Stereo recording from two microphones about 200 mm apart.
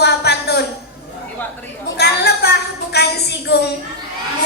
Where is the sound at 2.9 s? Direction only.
55° left (ahead or behind).